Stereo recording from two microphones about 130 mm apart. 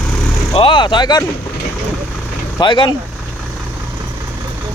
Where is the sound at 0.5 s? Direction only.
40° left (ahead or behind).